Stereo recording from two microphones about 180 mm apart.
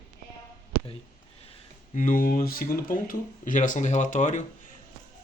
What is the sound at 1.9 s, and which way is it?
Speech, 50° left (ahead or behind).